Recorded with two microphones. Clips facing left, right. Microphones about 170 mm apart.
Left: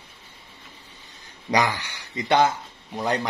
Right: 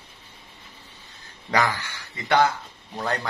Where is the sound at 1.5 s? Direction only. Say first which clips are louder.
Left 1 dB; 15° left (ahead or behind).